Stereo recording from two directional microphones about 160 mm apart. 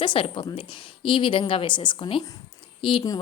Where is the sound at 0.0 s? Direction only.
30° left (ahead or behind).